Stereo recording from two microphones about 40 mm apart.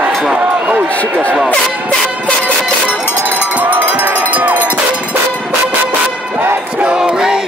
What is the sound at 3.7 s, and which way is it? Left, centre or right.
Run, right.